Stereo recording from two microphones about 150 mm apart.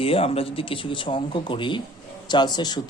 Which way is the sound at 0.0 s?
40° left (ahead or behind).